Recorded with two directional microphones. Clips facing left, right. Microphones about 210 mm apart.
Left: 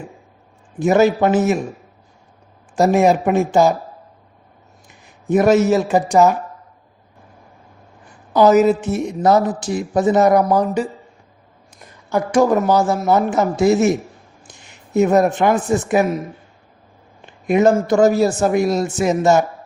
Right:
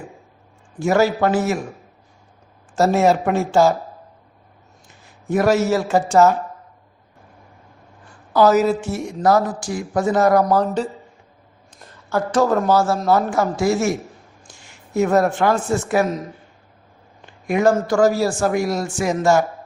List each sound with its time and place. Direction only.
0.8 s a woman's voice: 20° left (ahead or behind)
2.7 s speech: 15° left (ahead or behind)
5.0 s a woman's voice: 20° left (ahead or behind)
8.3 s a woman's voice: 20° left (ahead or behind)
12.0 s a woman's voice: 15° left (ahead or behind)
17.2 s a sound: 20° left (ahead or behind)
17.8 s a woman's voice: 20° left (ahead or behind)